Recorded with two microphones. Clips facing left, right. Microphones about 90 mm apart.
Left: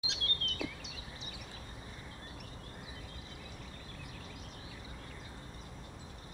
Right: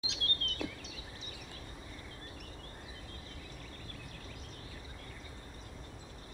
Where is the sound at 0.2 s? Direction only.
40° right (ahead or behind).